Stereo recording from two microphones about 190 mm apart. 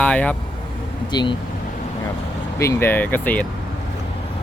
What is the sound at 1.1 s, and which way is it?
Speech, 25° left (ahead or behind).